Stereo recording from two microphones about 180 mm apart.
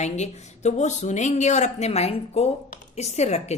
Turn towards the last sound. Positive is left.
turn(degrees=40)  # may be behind; listen again after turning